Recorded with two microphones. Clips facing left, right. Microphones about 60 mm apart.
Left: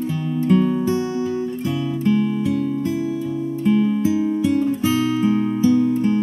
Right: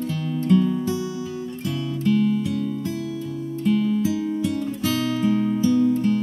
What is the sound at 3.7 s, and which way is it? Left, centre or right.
Music, left.